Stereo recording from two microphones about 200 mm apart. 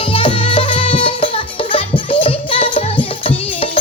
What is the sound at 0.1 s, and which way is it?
Music, 25° left (ahead or behind).